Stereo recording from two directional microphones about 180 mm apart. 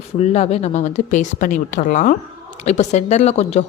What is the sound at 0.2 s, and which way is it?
Speech, 35° left (ahead or behind).